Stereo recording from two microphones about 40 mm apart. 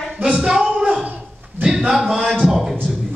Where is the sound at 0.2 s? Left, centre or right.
Centre.